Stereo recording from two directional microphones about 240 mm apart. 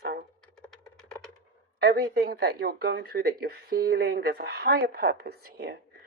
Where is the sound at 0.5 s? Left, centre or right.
Centre.